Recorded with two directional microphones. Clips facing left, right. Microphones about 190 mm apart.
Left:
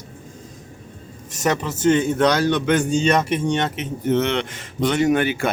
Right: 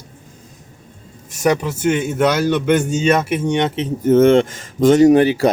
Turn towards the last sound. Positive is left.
turn(degrees=-35)  # may be behind; listen again after turning